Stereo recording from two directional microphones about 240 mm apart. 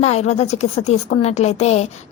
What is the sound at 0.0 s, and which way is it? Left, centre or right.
A woman's voice, left.